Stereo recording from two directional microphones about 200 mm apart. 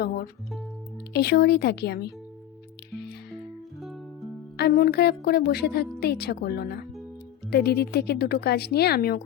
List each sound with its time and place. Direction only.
1.1 s a woman's voice: 55° left (ahead or behind)
4.5 s a woman's voice: 55° left (ahead or behind)